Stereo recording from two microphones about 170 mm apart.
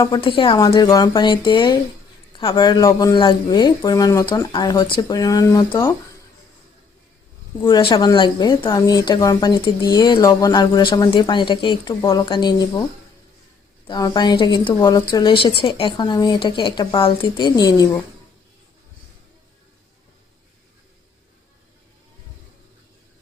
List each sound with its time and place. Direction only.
0.0 s speech: 25° left (ahead or behind)
7.6 s speech: 30° left (ahead or behind)
13.8 s speech: 25° left (ahead or behind)